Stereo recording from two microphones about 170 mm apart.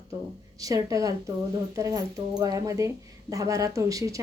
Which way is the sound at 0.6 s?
20° right (ahead or behind).